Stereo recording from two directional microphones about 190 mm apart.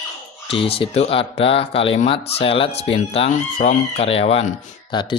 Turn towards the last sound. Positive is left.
turn(degrees=25)  # may be behind; listen again after turning